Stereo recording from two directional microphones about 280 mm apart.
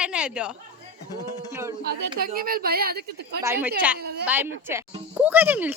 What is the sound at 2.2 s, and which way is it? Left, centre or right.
A woman's voice, right.